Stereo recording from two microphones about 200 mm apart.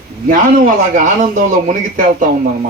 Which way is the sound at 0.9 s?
45° right (ahead or behind).